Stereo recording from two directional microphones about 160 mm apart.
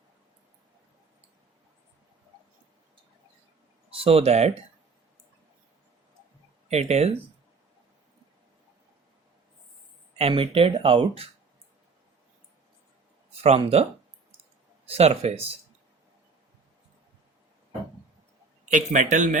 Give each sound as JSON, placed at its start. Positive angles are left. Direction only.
{"t": 3.9, "sound": "speech", "side_deg": -35}
{"t": 6.7, "sound": "speech", "side_deg": -45}
{"t": 10.2, "sound": "speech", "side_deg": -35}
{"t": 13.4, "sound": "speech", "side_deg": -40}
{"t": 14.8, "sound": "speech", "side_deg": -40}
{"t": 18.7, "sound": "speech", "side_deg": -50}